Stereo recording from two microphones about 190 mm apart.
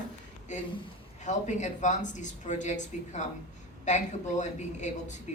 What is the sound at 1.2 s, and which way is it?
Speech, 40° left (ahead or behind).